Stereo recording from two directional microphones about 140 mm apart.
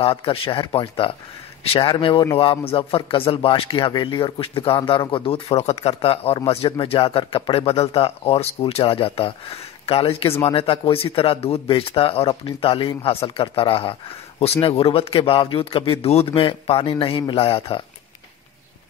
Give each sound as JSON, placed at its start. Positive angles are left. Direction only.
{"t": 0.0, "sound": "speech", "side_deg": 40}